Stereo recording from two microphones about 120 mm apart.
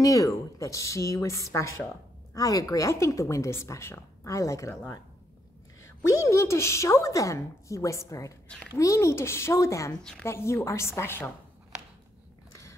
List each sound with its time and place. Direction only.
0.0 s a woman's voice: 30° left (ahead or behind)